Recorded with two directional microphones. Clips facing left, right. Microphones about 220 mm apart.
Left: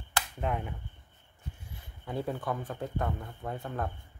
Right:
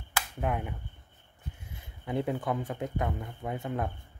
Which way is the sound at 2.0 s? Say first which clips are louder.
Right 3 dB; 15° right (ahead or behind).